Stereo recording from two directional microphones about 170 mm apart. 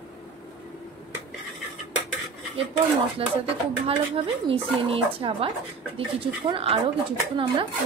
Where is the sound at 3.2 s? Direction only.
35° right (ahead or behind).